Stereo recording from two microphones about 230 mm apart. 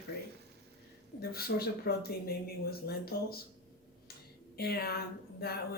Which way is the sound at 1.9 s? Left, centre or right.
Left.